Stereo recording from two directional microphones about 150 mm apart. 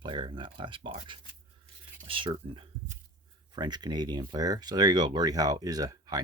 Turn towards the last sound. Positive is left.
turn(degrees=-25)  # may be behind; listen again after turning